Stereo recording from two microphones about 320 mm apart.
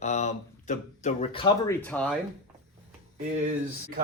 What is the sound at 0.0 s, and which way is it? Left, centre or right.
Speech, left.